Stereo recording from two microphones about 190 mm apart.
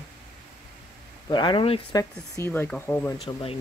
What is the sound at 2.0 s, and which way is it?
Speech, 15° left (ahead or behind).